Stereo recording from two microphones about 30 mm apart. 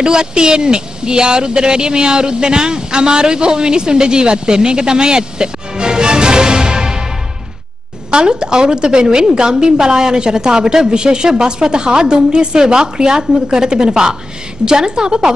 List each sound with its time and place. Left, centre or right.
0.0 s speech: right
8.1 s a woman's voice: right